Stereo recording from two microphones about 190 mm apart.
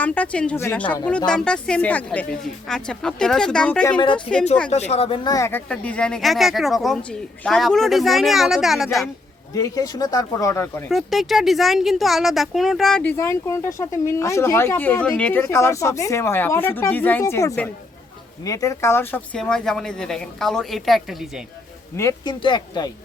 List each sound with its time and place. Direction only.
0.0 s speech: 5° left (ahead or behind)
3.8 s speech: 25° left (ahead or behind)
4.7 s speech: 35° left (ahead or behind); by 9.0 s centre (ahead or behind)
9.6 s speech: 20° left (ahead or behind)
10.8 s speech: centre (ahead or behind)
21.9 s speech: 20° left (ahead or behind)